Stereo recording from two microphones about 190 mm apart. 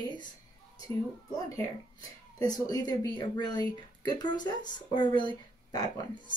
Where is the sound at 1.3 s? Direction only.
20° left (ahead or behind).